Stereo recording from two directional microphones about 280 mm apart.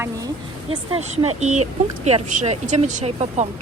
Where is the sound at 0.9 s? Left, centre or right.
Right.